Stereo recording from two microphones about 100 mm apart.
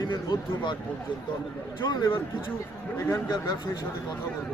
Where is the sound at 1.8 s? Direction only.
45° left (ahead or behind).